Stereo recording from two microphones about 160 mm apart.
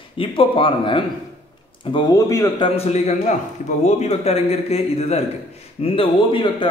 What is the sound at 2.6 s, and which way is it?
A man's voice, 40° left (ahead or behind).